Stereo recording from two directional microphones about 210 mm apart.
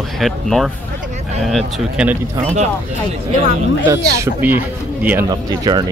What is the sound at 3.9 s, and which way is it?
Speech, 10° right (ahead or behind).